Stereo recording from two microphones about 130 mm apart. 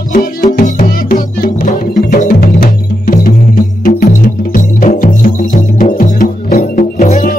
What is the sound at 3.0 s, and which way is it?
Music, 90° left.